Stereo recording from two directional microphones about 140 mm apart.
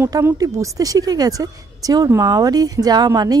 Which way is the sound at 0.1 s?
20° right (ahead or behind).